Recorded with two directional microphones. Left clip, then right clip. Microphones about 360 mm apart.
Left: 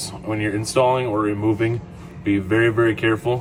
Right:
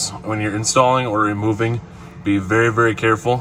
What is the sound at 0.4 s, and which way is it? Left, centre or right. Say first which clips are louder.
Speech: right 3 dB; centre.